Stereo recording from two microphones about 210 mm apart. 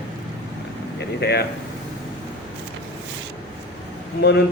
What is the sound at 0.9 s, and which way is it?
Speech, 50° left (ahead or behind).